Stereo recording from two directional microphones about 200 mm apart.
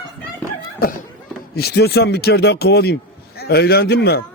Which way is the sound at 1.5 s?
50° left (ahead or behind).